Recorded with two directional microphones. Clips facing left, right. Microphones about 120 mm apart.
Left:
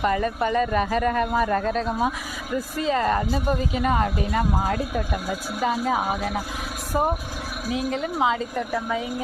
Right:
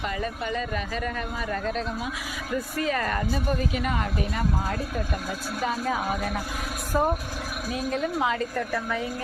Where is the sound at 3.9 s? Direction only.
40° left (ahead or behind).